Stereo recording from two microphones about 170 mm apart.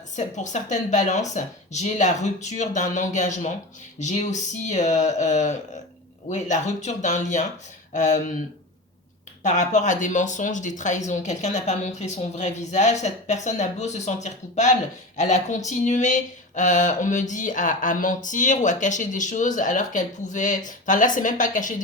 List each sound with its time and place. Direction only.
0.2 s speech: 45° left (ahead or behind)
9.4 s speech: 45° left (ahead or behind)